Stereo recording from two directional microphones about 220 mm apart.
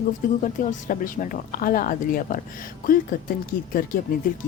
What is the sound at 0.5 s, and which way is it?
Speech, 35° left (ahead or behind).